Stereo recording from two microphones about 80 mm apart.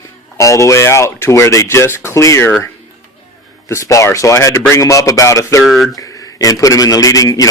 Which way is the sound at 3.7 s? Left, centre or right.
Left.